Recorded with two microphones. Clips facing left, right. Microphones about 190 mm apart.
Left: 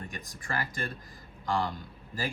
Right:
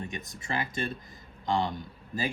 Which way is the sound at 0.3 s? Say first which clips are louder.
Even; 20° right (ahead or behind).